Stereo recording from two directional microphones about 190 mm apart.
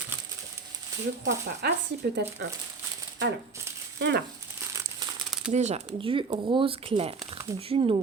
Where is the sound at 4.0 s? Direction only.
65° right (ahead or behind).